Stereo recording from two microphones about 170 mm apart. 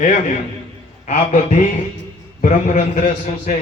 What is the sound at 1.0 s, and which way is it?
A man's voice, 40° left (ahead or behind).